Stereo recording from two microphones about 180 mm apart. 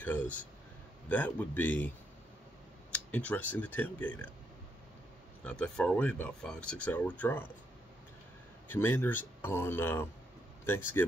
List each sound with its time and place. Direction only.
0.0 s speech: 10° left (ahead or behind)
2.9 s speech: 5° left (ahead or behind)
5.4 s speech: 5° left (ahead or behind)
8.6 s speech: 10° left (ahead or behind)